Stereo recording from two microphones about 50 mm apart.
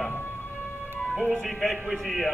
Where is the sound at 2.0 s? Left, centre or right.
Centre.